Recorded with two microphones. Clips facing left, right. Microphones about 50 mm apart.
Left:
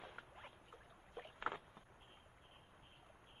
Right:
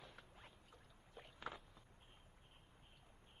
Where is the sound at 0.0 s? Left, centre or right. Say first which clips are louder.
Left 6 dB; left.